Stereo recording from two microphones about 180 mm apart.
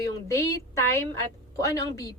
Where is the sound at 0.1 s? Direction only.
15° left (ahead or behind).